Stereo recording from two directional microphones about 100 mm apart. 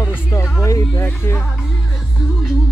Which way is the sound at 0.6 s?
30° left (ahead or behind).